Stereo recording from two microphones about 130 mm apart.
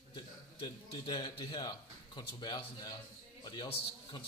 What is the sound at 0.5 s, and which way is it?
Speech, 35° left (ahead or behind).